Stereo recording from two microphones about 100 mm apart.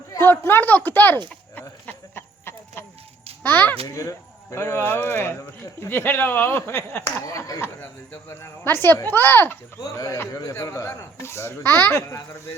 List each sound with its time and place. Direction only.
0.2 s speech: 20° left (ahead or behind)
1.5 s a sound: 20° left (ahead or behind)
3.4 s speech: 20° left (ahead or behind)
3.8 s speech: 30° left (ahead or behind)
9.8 s speech: 35° left (ahead or behind)